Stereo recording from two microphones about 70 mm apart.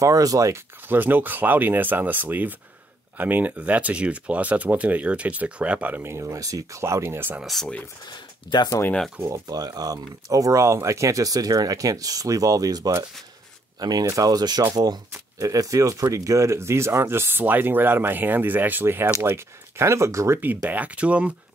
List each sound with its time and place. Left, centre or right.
0.0 s speech: right
0.8 s speech: right
6.0 s speech: right
8.1 s speech: left
9.5 s speech: right
13.7 s speech: right
14.0 s speech: right
20.7 s speech: centre